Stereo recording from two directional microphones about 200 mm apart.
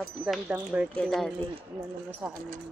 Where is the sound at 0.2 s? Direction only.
5° right (ahead or behind).